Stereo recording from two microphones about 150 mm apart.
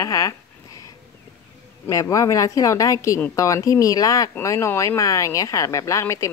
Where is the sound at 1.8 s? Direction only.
20° left (ahead or behind).